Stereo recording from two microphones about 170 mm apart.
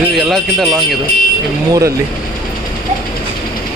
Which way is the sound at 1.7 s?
20° right (ahead or behind).